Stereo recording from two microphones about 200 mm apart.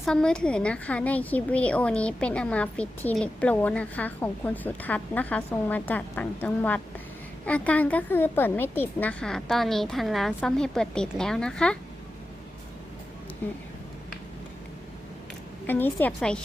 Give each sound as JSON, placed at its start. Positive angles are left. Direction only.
{"t": 0.0, "sound": "a woman's voice", "side_deg": 5}
{"t": 15.6, "sound": "a woman's voice", "side_deg": 10}